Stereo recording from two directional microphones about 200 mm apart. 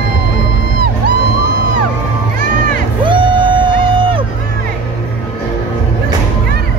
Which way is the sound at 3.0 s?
25° right (ahead or behind).